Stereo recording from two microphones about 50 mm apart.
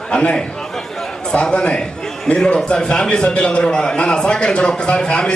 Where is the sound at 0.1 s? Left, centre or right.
Centre.